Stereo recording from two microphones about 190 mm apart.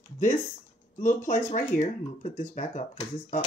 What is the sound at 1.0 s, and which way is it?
Speech, 40° left (ahead or behind).